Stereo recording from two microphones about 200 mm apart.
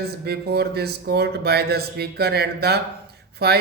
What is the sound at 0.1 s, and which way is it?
Speech, 55° right (ahead or behind).